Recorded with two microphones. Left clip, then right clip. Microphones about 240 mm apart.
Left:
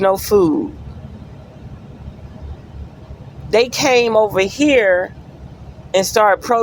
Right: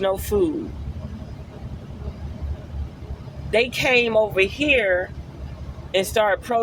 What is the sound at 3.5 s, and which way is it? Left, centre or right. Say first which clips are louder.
Speech: left 5 dB; left.